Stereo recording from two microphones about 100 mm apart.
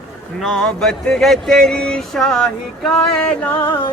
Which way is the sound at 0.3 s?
5° left (ahead or behind).